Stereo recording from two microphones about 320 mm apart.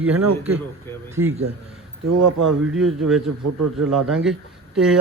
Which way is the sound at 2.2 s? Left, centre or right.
Right.